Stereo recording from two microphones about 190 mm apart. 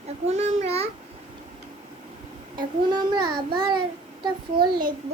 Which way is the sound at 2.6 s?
20° right (ahead or behind).